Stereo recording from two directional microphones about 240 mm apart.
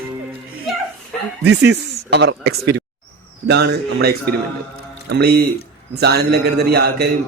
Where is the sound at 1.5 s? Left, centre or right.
Right.